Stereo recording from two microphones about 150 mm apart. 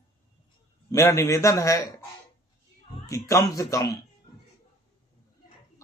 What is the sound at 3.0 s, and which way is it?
Speech, 20° left (ahead or behind).